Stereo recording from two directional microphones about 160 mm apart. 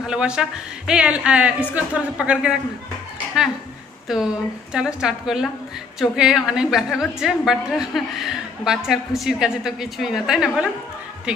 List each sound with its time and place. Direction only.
0.0 s speech: 5° right (ahead or behind)
4.1 s a woman's voice: centre (ahead or behind)